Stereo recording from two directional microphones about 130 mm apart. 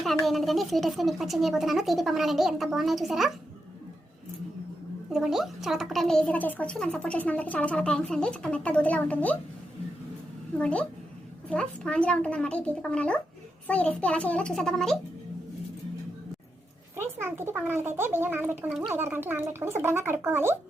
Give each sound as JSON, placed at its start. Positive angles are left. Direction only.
{"t": 0.3, "sound": "a woman's voice", "side_deg": 0}
{"t": 5.1, "sound": "speech", "side_deg": 0}
{"t": 10.6, "sound": "speech", "side_deg": 10}
{"t": 17.0, "sound": "speech", "side_deg": -20}
{"t": 18.7, "sound": "a woman's voice", "side_deg": -5}
{"t": 18.9, "sound": "speech", "side_deg": -15}